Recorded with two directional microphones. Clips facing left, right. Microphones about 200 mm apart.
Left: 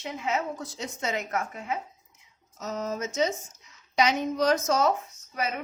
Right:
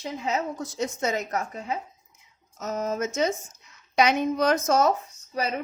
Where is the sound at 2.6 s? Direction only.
50° right (ahead or behind).